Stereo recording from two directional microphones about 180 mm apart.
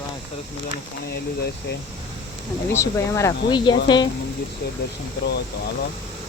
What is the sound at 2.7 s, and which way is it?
Speech, 15° left (ahead or behind).